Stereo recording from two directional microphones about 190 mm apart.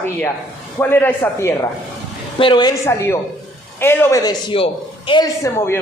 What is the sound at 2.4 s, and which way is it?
A man's voice, 25° left (ahead or behind).